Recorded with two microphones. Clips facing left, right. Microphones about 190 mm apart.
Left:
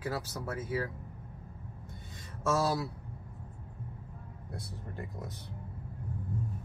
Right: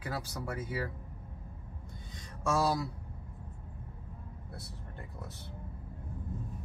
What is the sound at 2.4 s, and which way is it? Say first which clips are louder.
Speech: even; centre (ahead or behind).